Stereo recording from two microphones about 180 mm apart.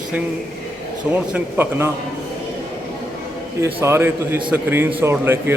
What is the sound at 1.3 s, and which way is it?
Speech, 15° right (ahead or behind).